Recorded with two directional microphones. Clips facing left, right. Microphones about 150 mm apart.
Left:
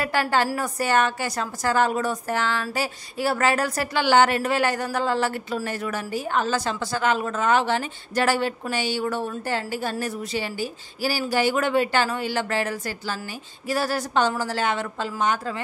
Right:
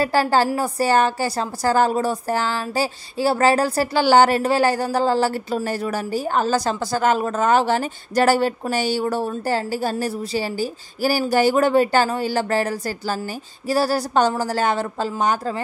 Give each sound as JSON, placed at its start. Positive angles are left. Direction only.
{"t": 0.0, "sound": "a woman's voice", "side_deg": -35}